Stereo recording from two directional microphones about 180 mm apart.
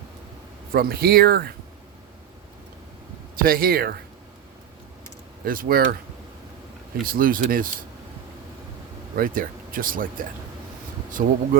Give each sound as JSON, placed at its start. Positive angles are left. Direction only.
{"t": 0.7, "sound": "speech", "side_deg": -55}
{"t": 3.4, "sound": "speech", "side_deg": -55}
{"t": 5.5, "sound": "speech", "side_deg": -55}
{"t": 7.0, "sound": "speech", "side_deg": -50}
{"t": 9.1, "sound": "speech", "side_deg": -50}